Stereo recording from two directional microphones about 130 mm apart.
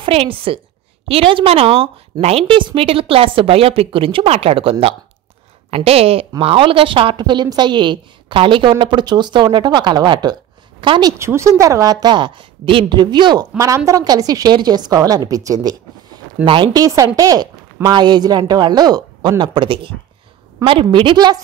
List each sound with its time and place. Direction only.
0.0 s a woman's voice: 45° right (ahead or behind)
11.1 s a woman's voice: 20° right (ahead or behind); by 16.8 s 40° right (ahead or behind)
16.8 s a woman's voice: 25° right (ahead or behind)